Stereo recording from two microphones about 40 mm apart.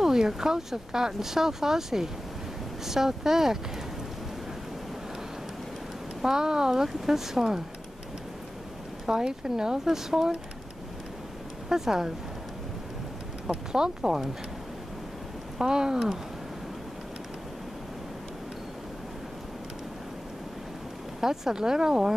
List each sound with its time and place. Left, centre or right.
0.0 s speech: centre
6.2 s speech: centre
9.0 s speech: centre
11.7 s speech: centre
13.7 s speech: centre
15.5 s speech: centre
21.2 s speech: centre